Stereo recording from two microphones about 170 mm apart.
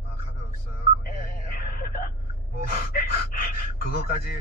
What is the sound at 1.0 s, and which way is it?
Music, 60° left (ahead or behind).